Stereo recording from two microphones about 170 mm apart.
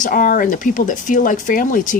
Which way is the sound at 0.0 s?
55° left (ahead or behind).